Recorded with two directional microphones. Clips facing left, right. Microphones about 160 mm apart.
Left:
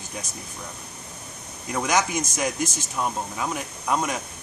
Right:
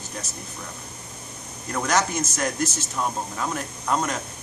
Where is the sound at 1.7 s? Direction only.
10° left (ahead or behind).